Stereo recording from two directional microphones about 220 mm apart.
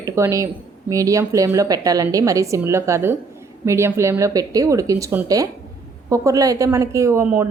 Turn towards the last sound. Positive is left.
turn(degrees=-10)  # may be behind; listen again after turning